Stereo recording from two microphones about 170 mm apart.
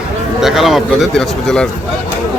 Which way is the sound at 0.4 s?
Centre (ahead or behind).